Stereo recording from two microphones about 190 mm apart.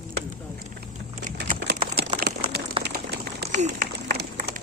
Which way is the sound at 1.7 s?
60° right (ahead or behind).